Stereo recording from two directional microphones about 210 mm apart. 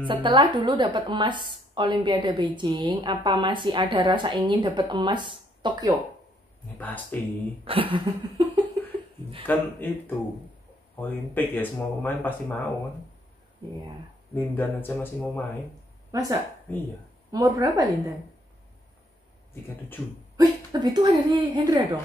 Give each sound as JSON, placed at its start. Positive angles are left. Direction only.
{"t": 0.0, "sound": "a woman's voice", "side_deg": -25}
{"t": 6.8, "sound": "speech", "side_deg": 5}
{"t": 7.6, "sound": "a woman's voice", "side_deg": -25}
{"t": 9.5, "sound": "speech", "side_deg": 10}
{"t": 14.3, "sound": "speech", "side_deg": 10}
{"t": 16.1, "sound": "a woman's voice", "side_deg": -15}
{"t": 20.3, "sound": "a woman's voice", "side_deg": -20}